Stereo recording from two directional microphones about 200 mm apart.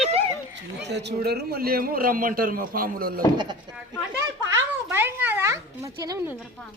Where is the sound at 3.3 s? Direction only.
20° right (ahead or behind).